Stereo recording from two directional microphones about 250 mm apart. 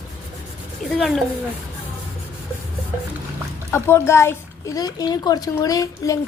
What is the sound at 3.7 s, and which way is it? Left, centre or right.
A child's voice, centre.